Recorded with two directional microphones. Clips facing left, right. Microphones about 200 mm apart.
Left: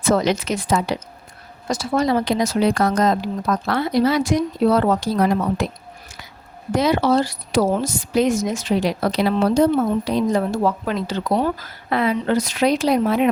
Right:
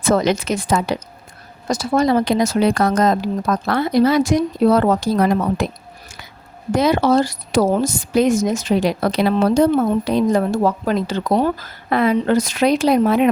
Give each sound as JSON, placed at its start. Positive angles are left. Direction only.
{"t": 0.0, "sound": "speech", "side_deg": -50}
{"t": 6.7, "sound": "speech", "side_deg": -45}